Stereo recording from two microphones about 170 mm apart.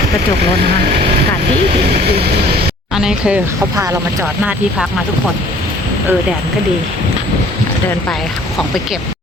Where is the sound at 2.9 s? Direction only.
5° right (ahead or behind).